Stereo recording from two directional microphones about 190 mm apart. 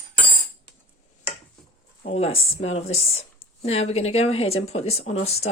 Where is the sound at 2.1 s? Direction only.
30° left (ahead or behind).